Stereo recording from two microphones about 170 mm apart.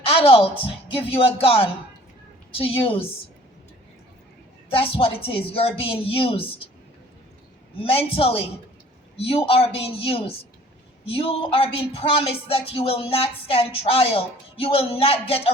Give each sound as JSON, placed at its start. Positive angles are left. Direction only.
{"t": 0.1, "sound": "speech", "side_deg": 35}
{"t": 4.7, "sound": "speech", "side_deg": 35}
{"t": 7.8, "sound": "speech", "side_deg": 35}